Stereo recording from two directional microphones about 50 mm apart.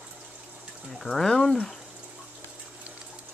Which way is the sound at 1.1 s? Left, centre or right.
Centre.